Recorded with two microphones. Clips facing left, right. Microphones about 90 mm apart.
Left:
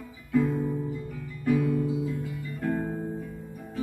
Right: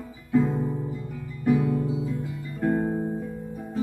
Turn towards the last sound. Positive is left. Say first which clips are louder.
# right 5 dB
turn(degrees=-25)  # may be behind; listen again after turning